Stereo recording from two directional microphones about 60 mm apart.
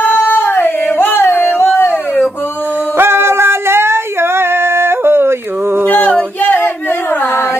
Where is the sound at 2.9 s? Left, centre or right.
Right.